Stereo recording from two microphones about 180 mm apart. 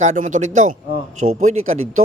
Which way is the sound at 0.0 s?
40° right (ahead or behind).